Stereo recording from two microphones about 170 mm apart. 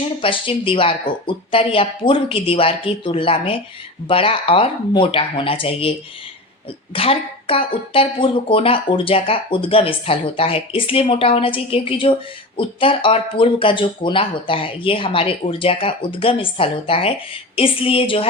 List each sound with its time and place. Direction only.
0.2 s speech: 30° left (ahead or behind)
6.9 s speech: 35° left (ahead or behind)